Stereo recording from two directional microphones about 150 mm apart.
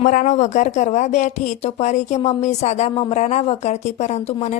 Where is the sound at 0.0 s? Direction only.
60° left (ahead or behind).